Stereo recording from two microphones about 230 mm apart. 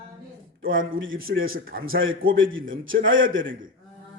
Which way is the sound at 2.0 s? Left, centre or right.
Right.